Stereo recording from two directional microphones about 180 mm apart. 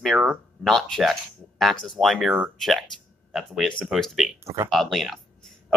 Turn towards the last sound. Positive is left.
turn(degrees=0)  # may be behind; listen again after turning